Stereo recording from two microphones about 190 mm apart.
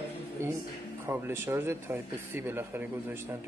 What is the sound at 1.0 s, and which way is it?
Speech, 10° right (ahead or behind).